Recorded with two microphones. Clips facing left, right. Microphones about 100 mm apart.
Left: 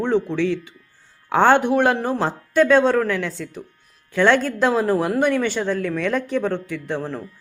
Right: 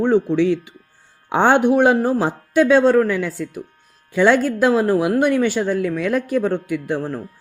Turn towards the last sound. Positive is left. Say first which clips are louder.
# right 4 dB
turn(degrees=-5)  # may be behind; listen again after turning